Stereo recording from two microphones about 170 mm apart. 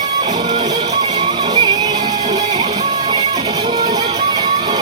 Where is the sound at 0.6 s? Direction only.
25° right (ahead or behind).